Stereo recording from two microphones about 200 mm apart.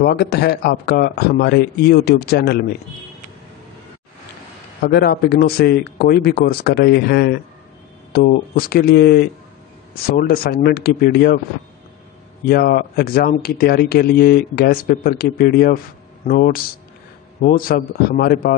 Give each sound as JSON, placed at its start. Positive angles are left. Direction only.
{"t": 0.0, "sound": "speech", "side_deg": 55}
{"t": 4.8, "sound": "speech", "side_deg": 55}
{"t": 12.4, "sound": "speech", "side_deg": 50}